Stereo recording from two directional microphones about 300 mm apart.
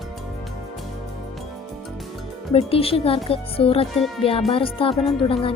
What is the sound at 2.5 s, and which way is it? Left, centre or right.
Speech, centre.